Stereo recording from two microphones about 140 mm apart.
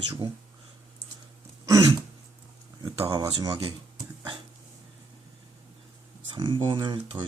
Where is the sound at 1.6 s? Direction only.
25° right (ahead or behind).